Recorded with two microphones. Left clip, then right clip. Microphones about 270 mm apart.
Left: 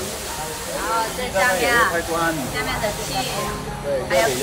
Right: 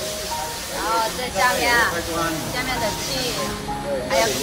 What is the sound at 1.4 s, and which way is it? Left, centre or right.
Speech, centre.